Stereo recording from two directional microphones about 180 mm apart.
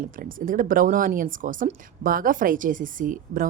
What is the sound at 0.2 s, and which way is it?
A woman's voice, 50° right (ahead or behind).